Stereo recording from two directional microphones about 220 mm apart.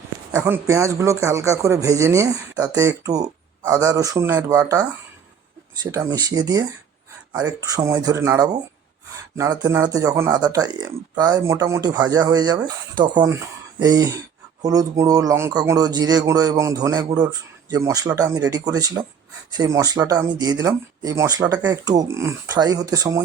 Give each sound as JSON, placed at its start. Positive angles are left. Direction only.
{"t": 0.3, "sound": "a man's voice", "side_deg": -10}